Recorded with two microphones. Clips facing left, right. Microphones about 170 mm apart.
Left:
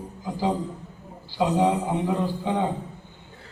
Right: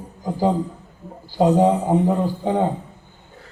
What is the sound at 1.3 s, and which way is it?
Speech, 45° right (ahead or behind).